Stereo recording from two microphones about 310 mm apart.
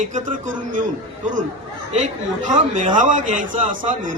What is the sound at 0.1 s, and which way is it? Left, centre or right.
Speech, right.